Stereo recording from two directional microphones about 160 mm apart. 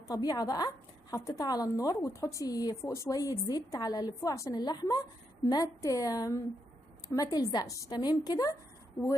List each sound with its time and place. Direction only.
0.1 s a woman's voice: 25° left (ahead or behind)